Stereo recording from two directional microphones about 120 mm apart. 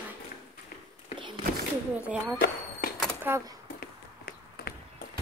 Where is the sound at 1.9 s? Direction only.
15° right (ahead or behind).